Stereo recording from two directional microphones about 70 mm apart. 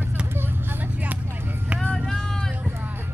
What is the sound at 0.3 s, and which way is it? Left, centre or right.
Vehicle, right.